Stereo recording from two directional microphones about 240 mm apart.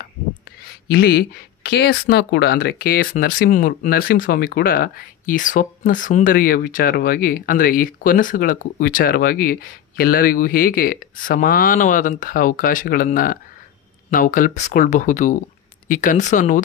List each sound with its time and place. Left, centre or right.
0.8 s speech: left